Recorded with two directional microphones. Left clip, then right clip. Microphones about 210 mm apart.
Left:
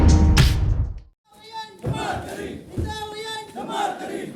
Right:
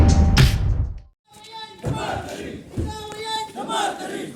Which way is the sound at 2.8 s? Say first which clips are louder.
Right 1 dB; 5° left (ahead or behind).